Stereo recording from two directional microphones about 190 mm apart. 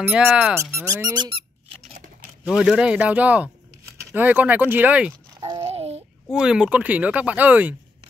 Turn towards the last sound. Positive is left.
turn(degrees=-10)  # may be behind; listen again after turning